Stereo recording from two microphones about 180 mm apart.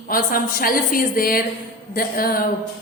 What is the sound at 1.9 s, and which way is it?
Music, 55° left (ahead or behind).